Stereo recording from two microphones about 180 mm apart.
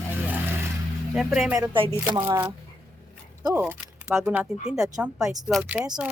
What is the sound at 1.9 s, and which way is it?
Speech, 15° right (ahead or behind).